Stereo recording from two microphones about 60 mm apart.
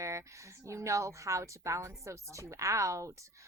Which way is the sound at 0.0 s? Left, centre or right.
Right.